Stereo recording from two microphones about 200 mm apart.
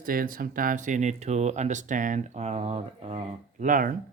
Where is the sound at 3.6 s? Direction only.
40° right (ahead or behind).